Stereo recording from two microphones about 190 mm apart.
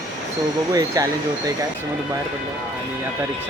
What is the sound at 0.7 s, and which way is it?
Speech, 15° right (ahead or behind).